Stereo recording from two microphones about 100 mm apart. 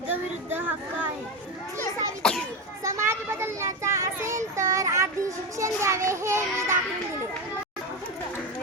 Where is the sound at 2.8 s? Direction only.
30° right (ahead or behind).